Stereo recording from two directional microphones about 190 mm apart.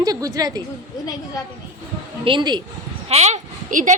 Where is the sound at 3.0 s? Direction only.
35° right (ahead or behind).